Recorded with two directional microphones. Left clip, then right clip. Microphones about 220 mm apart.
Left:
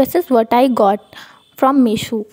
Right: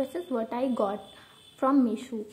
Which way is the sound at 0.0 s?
45° left (ahead or behind).